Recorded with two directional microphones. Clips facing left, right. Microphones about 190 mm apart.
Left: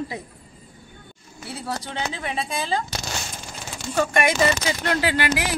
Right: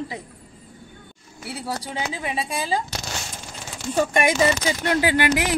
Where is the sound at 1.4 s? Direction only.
10° right (ahead or behind).